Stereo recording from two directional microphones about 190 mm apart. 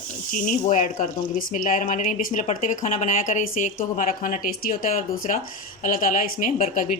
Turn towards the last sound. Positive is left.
turn(degrees=45)  # may be behind; listen again after turning